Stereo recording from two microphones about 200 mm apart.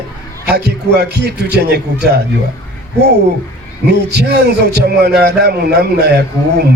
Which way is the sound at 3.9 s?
55° right (ahead or behind).